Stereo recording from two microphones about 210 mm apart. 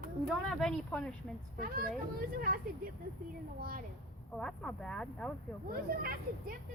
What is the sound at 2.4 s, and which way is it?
Speech, 45° right (ahead or behind).